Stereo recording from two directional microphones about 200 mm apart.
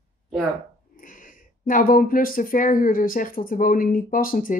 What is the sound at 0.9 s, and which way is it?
Speech, 40° left (ahead or behind).